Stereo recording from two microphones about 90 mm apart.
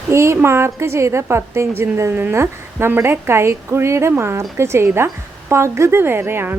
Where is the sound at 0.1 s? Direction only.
30° right (ahead or behind).